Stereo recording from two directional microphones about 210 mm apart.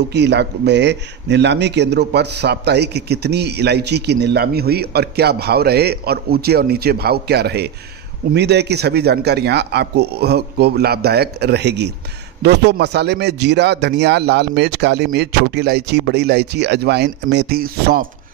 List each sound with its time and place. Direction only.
0.1 s speech: 55° right (ahead or behind)